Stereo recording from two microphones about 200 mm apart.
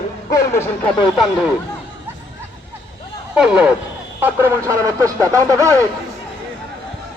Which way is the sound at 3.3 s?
5° right (ahead or behind).